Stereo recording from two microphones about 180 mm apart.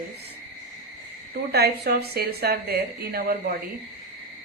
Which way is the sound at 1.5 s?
60° right (ahead or behind).